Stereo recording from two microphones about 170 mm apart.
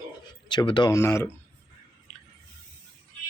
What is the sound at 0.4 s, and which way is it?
Speech, 25° left (ahead or behind).